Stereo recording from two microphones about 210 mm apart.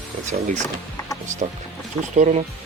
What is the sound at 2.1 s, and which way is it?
Speech, 35° right (ahead or behind).